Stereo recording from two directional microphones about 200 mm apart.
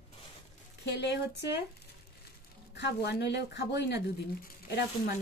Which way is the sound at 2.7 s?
55° left (ahead or behind).